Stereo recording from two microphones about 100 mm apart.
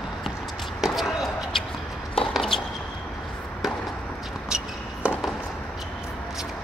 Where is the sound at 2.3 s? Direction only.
5° left (ahead or behind).